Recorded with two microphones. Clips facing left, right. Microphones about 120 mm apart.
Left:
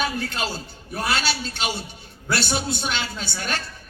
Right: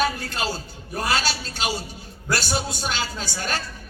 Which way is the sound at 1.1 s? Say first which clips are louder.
Even; 40° right (ahead or behind).